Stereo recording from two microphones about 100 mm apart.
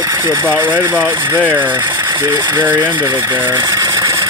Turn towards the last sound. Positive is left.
turn(degrees=-50)  # may be behind; listen again after turning